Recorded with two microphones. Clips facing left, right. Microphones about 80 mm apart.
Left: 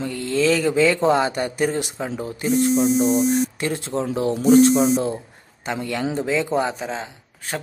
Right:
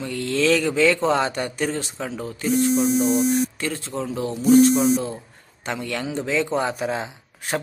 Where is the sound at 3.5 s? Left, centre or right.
Left.